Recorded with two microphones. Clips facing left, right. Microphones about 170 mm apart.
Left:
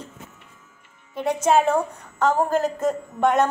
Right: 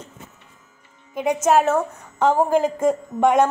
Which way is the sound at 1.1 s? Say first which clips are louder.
Right 2 dB; 10° right (ahead or behind).